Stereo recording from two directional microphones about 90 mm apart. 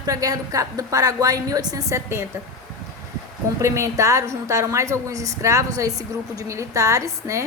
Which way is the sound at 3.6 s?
35° right (ahead or behind).